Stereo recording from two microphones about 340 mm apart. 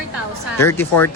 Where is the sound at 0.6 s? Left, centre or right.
Centre.